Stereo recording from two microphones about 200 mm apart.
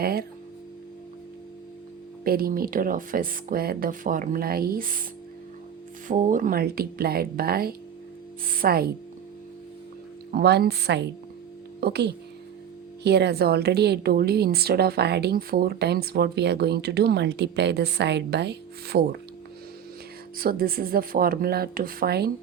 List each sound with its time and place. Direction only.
0.0 s speech: 50° right (ahead or behind)
2.2 s speech: 45° right (ahead or behind)
6.1 s speech: 40° right (ahead or behind)
10.3 s speech: 50° right (ahead or behind)
20.4 s speech: 50° right (ahead or behind)